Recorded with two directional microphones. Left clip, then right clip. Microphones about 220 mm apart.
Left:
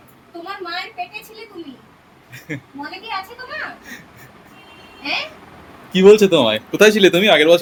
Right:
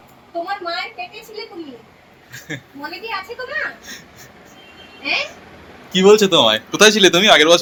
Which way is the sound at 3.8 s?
25° left (ahead or behind).